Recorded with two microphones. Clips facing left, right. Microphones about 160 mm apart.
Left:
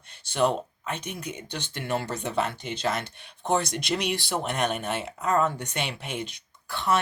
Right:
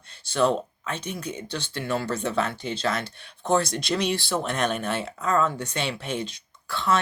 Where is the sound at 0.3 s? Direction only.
15° left (ahead or behind).